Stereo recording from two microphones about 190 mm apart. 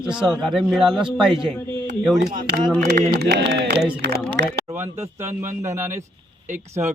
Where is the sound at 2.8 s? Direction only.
60° right (ahead or behind).